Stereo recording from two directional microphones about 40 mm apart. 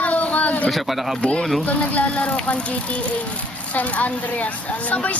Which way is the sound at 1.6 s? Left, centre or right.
Left.